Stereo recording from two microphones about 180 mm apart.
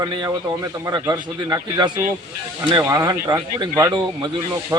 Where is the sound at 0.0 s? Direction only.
25° right (ahead or behind).